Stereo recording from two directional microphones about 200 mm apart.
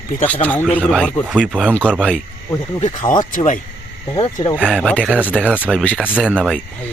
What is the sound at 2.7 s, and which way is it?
Speech, 35° left (ahead or behind).